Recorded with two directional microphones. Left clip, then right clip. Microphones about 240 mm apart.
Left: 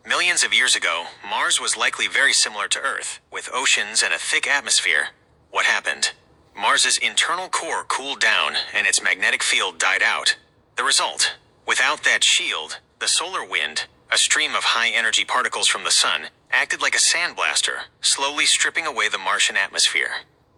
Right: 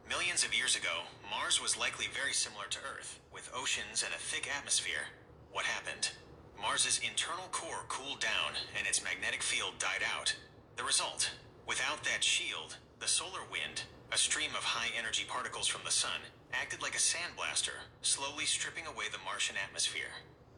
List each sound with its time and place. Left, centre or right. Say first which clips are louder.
0.1 s speech: left 16 dB; left